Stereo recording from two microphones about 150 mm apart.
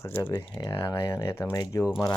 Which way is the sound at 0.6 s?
30° left (ahead or behind).